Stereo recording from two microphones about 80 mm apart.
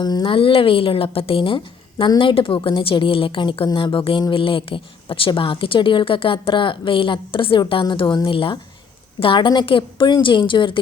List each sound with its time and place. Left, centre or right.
0.0 s speech: left